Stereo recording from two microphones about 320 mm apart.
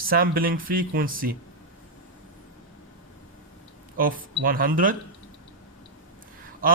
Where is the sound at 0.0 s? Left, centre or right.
Right.